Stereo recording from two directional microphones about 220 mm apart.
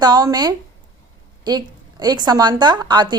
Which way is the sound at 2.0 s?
20° right (ahead or behind).